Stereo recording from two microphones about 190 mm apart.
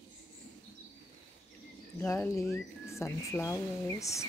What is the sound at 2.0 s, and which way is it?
Speech, 15° left (ahead or behind).